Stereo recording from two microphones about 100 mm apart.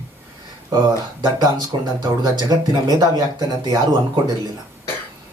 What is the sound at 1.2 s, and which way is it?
Speech, 45° right (ahead or behind).